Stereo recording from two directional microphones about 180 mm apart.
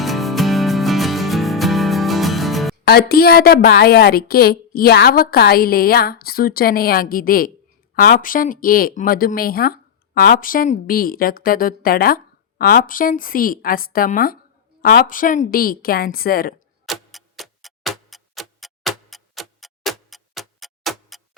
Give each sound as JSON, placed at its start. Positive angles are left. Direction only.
{"t": 0.0, "sound": "music", "side_deg": 0}
{"t": 2.8, "sound": "a woman's voice", "side_deg": 60}
{"t": 16.8, "sound": "tick-tock", "side_deg": 0}